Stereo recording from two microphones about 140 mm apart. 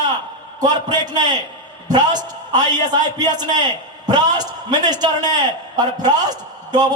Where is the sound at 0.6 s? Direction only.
30° right (ahead or behind).